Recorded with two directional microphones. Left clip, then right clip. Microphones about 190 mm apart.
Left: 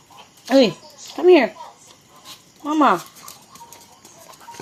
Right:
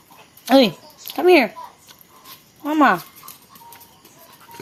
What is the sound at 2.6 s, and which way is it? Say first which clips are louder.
Speech: right 1 dB; 55° right (ahead or behind).